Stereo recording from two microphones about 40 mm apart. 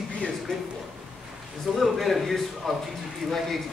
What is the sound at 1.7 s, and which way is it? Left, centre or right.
Speech, centre.